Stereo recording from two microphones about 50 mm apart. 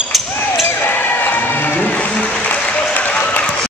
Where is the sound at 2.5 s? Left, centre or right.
Left.